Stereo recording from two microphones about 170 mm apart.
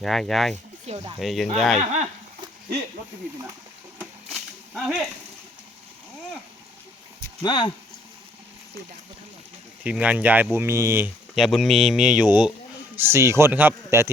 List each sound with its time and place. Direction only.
0.0 s speech: centre (ahead or behind)
0.9 s speech: 30° right (ahead or behind)
1.2 s speech: centre (ahead or behind)
4.3 s a sound: centre (ahead or behind)
7.4 s speech: 25° left (ahead or behind)
9.8 s speech: 5° right (ahead or behind)
11.3 s speech: centre (ahead or behind)